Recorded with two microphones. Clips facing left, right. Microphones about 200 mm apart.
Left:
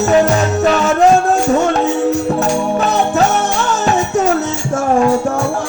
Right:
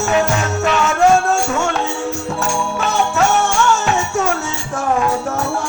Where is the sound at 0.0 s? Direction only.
35° left (ahead or behind).